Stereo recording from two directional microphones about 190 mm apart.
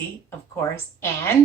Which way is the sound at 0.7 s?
15° left (ahead or behind).